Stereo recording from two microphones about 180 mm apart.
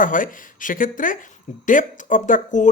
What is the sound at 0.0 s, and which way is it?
Speech, 50° left (ahead or behind).